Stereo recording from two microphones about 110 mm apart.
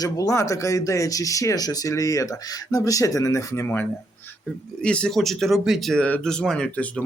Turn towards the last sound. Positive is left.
turn(degrees=15)  # may be behind; listen again after turning